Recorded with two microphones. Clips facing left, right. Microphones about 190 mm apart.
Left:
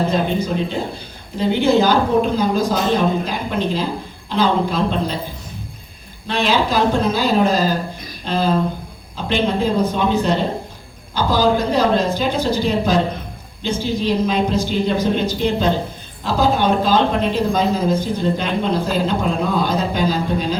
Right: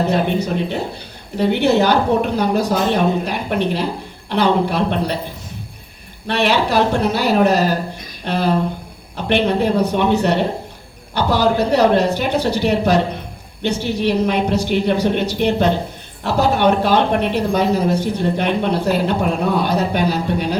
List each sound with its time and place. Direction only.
0.0 s speech: 70° right (ahead or behind)
6.2 s speech: 65° right (ahead or behind)